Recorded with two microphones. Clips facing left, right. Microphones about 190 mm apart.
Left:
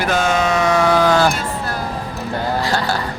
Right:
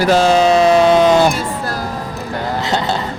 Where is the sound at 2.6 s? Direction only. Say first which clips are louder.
Right 3 dB; 20° right (ahead or behind).